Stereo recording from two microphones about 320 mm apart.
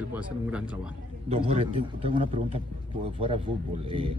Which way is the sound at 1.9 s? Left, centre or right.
Centre.